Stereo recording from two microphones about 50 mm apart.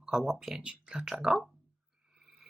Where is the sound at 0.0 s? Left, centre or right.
Centre.